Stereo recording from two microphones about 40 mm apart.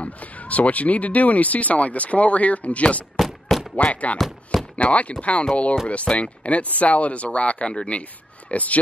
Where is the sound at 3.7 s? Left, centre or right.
Left.